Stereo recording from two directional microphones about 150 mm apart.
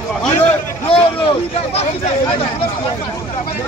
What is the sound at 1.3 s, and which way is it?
Speech, 40° left (ahead or behind).